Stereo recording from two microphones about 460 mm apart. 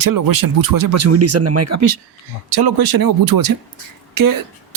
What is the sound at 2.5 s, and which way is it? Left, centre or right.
Speech, right.